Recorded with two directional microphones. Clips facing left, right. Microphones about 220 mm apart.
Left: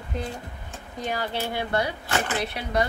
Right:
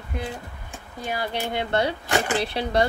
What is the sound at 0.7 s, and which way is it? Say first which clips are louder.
Speech: left 1 dB; 10° right (ahead or behind).